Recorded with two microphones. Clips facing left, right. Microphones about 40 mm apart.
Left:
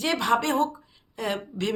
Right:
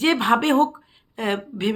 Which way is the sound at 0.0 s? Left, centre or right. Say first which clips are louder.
Right 5 dB; right.